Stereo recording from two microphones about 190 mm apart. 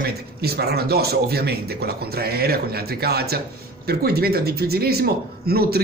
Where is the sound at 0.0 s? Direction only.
55° right (ahead or behind).